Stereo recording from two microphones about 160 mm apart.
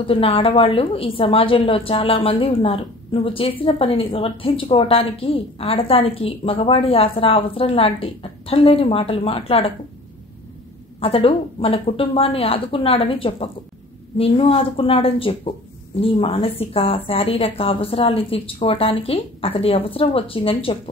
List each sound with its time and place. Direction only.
0.0 s a woman's voice: 35° left (ahead or behind)
11.0 s a woman's voice: 35° left (ahead or behind)